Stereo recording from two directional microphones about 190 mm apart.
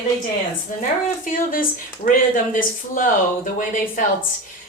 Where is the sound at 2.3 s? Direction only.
45° left (ahead or behind).